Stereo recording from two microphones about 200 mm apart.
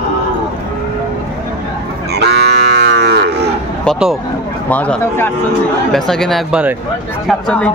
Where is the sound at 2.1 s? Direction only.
55° right (ahead or behind).